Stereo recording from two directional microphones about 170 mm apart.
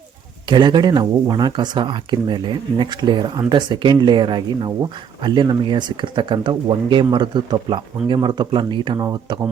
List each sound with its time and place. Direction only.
0.4 s speech: 25° right (ahead or behind)